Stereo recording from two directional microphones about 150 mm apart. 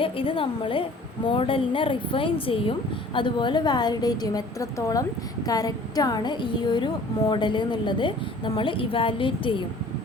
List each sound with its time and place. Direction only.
0.0 s a woman's voice: 35° left (ahead or behind)